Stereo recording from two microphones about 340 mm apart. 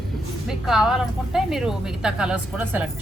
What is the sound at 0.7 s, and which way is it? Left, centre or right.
Speech, centre.